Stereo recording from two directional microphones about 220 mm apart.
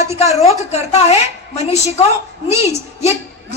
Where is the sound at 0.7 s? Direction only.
30° left (ahead or behind).